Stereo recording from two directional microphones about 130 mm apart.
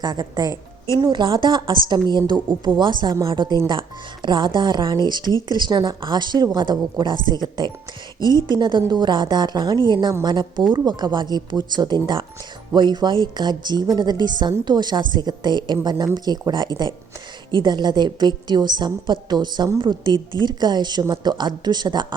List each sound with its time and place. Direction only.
0.0 s a woman's voice: 35° right (ahead or behind)